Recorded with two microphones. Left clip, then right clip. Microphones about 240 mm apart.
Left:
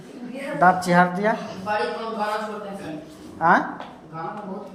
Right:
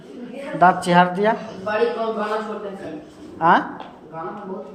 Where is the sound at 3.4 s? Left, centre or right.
Centre.